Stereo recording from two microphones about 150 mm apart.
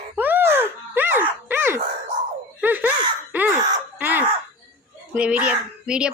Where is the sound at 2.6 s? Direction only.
10° right (ahead or behind).